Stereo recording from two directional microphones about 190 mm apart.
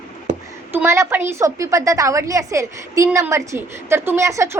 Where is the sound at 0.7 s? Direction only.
15° right (ahead or behind).